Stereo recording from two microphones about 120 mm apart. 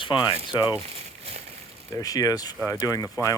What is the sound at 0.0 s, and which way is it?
Speech, 40° left (ahead or behind).